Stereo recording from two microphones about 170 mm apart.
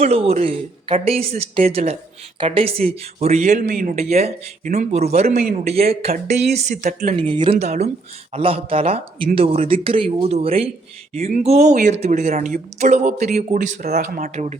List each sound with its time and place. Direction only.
0.0 s speech: 35° right (ahead or behind); by 3.9 s 55° right (ahead or behind)
3.9 s speech: 40° right (ahead or behind)
7.2 s speech: 30° right (ahead or behind)
7.6 s speech: 40° right (ahead or behind)